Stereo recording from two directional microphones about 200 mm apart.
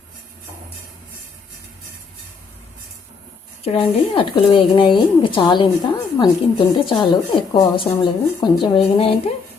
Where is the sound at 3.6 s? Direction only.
30° left (ahead or behind).